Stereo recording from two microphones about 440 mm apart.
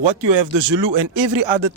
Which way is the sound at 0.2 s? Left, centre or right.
Right.